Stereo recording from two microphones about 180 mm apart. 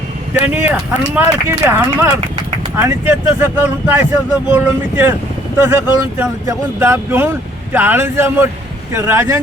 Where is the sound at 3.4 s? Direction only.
10° right (ahead or behind).